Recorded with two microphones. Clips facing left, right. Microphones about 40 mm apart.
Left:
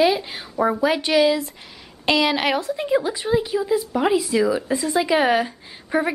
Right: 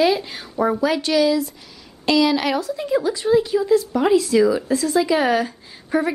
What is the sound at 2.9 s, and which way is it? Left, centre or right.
A woman's voice, centre.